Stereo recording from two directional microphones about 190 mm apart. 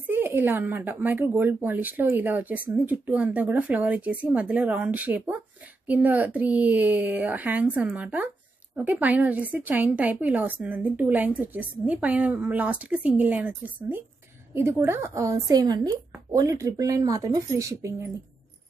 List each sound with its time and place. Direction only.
0.0 s speech: 10° right (ahead or behind)